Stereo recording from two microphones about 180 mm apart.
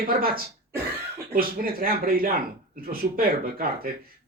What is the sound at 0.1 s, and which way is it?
Speech, 55° right (ahead or behind).